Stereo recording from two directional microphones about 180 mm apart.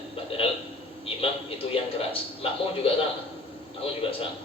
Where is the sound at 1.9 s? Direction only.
30° left (ahead or behind).